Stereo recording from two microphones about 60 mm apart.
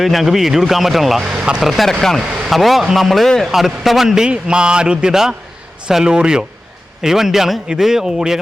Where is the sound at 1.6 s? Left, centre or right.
Centre.